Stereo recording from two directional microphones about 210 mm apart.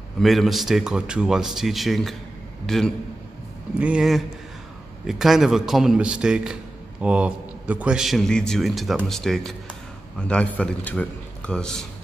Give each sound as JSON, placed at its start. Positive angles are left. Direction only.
{"t": 0.2, "sound": "a man's voice", "side_deg": 0}